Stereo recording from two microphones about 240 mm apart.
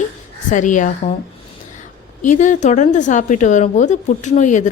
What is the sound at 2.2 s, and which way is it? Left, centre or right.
A woman's voice, left.